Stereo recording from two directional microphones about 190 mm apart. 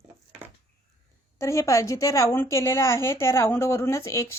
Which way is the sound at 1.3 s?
15° left (ahead or behind).